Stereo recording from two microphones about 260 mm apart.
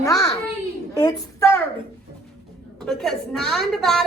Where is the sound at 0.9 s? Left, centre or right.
Centre.